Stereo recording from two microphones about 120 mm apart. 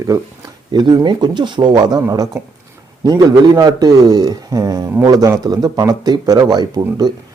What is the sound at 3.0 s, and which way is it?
Speech, 35° right (ahead or behind).